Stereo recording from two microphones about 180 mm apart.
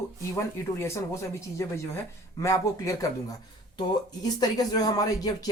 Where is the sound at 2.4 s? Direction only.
15° left (ahead or behind).